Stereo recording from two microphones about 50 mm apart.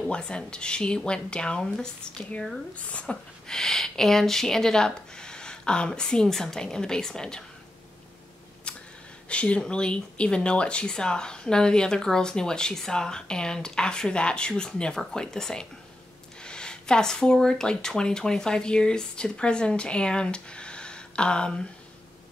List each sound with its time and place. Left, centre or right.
0.1 s speech: centre
2.7 s speech: left
3.4 s speech: centre
8.7 s a sound: centre
9.3 s speech: left